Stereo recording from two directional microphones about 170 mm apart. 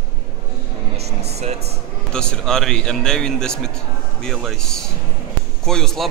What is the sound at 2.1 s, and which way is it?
A man's voice, 5° left (ahead or behind).